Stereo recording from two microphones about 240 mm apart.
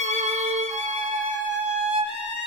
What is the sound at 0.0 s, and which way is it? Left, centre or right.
Violin, right.